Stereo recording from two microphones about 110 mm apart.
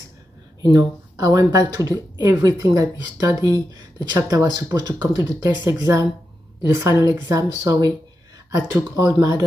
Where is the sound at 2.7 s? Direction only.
35° right (ahead or behind).